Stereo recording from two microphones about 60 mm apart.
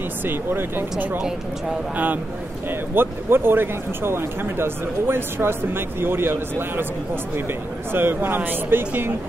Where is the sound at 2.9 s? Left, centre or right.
Right.